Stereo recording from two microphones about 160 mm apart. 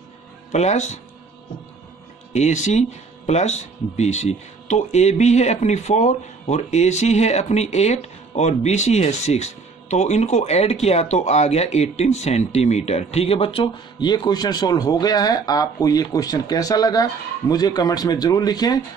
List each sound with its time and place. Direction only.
0.5 s speech: 45° left (ahead or behind)
2.3 s speech: 45° left (ahead or behind); by 18.8 s 25° left (ahead or behind)